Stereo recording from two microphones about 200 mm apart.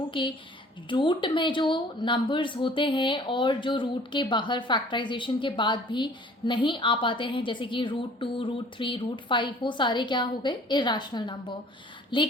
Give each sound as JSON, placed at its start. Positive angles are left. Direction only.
{"t": 0.1, "sound": "a woman's voice", "side_deg": 25}